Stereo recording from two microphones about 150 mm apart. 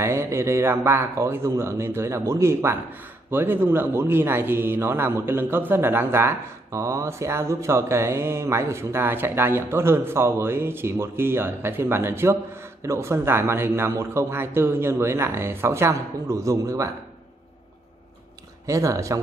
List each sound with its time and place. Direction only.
0.0 s a man's voice: 20° right (ahead or behind)
18.7 s speech: 20° right (ahead or behind)